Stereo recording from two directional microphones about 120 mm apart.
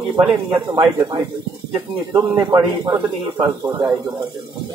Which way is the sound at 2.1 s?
25° right (ahead or behind).